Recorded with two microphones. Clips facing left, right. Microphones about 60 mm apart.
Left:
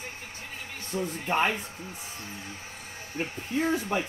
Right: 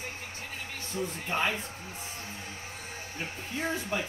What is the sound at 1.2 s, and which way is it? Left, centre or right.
Speech, left.